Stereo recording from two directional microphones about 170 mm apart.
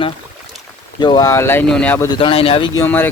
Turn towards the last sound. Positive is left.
turn(degrees=10)  # may be behind; listen again after turning